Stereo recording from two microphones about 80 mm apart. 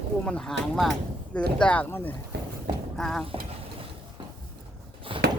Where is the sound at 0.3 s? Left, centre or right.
Centre.